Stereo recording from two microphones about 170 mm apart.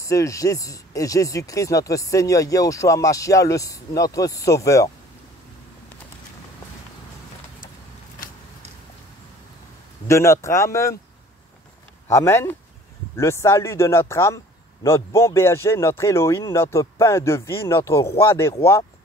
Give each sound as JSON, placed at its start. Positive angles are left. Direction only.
{"t": 0.0, "sound": "speech", "side_deg": 20}
{"t": 10.0, "sound": "speech", "side_deg": 15}
{"t": 12.1, "sound": "speech", "side_deg": 15}